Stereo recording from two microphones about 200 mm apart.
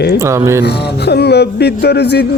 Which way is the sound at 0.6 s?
55° left (ahead or behind).